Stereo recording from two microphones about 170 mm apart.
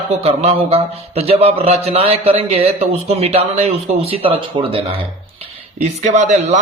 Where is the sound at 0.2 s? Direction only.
35° right (ahead or behind).